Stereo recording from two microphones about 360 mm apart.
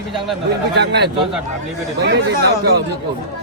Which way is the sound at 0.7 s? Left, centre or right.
Right.